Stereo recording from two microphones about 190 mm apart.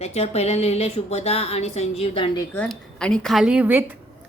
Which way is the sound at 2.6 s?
5° left (ahead or behind).